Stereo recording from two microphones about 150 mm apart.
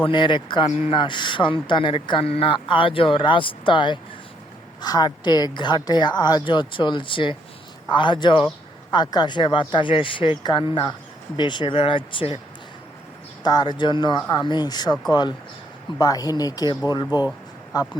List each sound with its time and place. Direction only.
0.0 s a man's voice: 30° left (ahead or behind)
13.4 s speech: 25° left (ahead or behind)
16.0 s speech: 25° left (ahead or behind)